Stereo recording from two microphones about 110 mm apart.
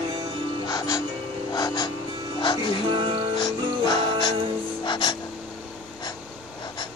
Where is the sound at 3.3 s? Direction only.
45° left (ahead or behind).